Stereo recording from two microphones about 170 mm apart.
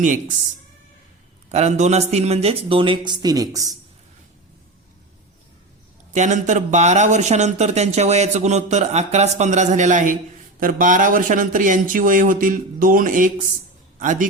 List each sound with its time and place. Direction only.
0.0 s a man's voice: 50° right (ahead or behind)
1.5 s a man's voice: 40° right (ahead or behind); by 3.8 s 20° right (ahead or behind)
6.1 s a man's voice: 45° right (ahead or behind)